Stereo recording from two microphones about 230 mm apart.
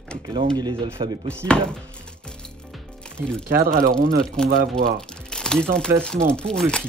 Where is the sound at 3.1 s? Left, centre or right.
Centre.